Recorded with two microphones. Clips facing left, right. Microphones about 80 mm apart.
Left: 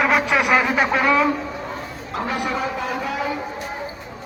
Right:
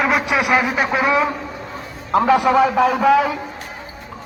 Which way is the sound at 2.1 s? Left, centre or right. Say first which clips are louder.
Right 11 dB; right.